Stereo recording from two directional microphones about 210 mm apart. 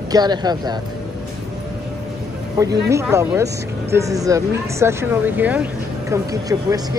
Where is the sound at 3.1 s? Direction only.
15° right (ahead or behind).